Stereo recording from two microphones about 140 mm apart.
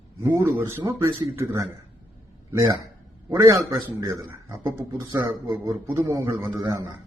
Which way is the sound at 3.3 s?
25° right (ahead or behind).